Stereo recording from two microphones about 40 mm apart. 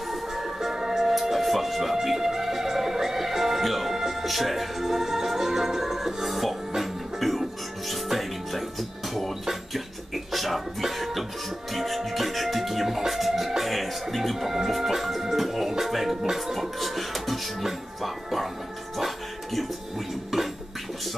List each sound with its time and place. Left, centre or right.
0.1 s music: centre
10.1 s a sound: centre
11.7 s music: centre